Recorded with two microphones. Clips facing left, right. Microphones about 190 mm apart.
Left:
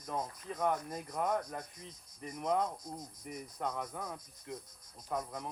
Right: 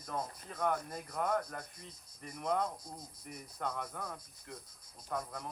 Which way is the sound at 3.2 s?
Centre (ahead or behind).